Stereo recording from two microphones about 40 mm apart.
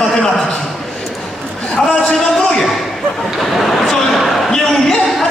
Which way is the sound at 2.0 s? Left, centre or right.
Centre.